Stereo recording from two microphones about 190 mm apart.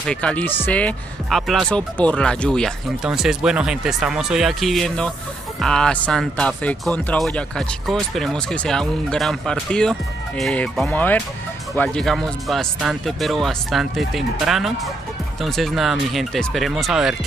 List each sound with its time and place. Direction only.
0.1 s speech: 5° left (ahead or behind)